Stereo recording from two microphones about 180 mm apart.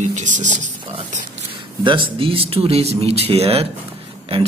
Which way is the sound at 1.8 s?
25° right (ahead or behind).